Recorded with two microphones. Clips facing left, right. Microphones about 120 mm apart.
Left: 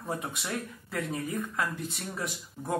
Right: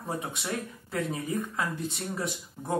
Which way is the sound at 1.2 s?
20° right (ahead or behind).